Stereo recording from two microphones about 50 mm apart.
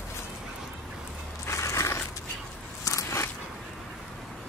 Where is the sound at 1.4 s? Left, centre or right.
Left.